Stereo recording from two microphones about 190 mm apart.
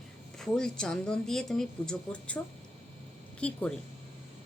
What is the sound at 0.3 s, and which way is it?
Speech, 5° left (ahead or behind).